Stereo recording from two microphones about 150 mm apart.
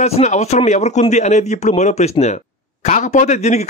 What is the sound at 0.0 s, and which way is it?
A man's voice, 50° left (ahead or behind).